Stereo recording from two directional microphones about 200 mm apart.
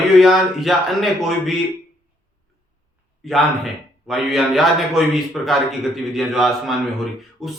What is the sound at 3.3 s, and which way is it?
A man's voice, centre (ahead or behind).